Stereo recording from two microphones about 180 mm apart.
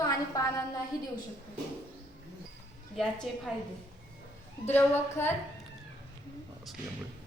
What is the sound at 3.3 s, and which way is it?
Speech, centre (ahead or behind).